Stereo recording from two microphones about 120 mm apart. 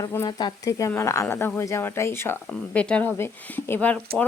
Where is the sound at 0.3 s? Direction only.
35° left (ahead or behind); by 2.4 s 20° left (ahead or behind).